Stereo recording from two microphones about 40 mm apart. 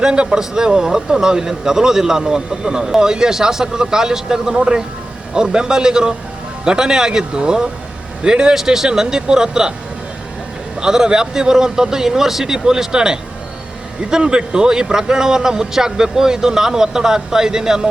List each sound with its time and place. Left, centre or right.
0.0 s speech: right
10.8 s speech: centre